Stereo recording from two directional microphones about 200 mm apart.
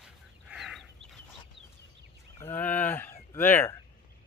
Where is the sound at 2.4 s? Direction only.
10° left (ahead or behind).